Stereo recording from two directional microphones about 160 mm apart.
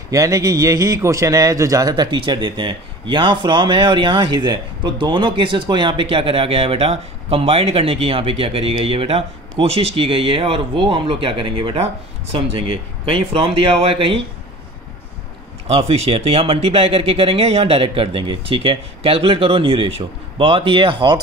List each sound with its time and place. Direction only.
0.1 s a man's voice: 20° right (ahead or behind)
15.7 s a man's voice: 40° right (ahead or behind)